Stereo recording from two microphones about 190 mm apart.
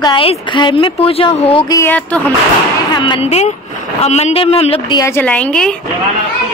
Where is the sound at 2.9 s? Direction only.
25° left (ahead or behind).